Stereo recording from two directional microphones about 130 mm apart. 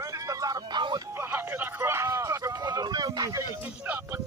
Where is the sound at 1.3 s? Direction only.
15° right (ahead or behind); by 3.4 s 30° right (ahead or behind).